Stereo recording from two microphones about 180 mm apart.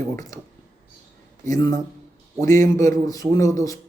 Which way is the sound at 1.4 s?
20° left (ahead or behind).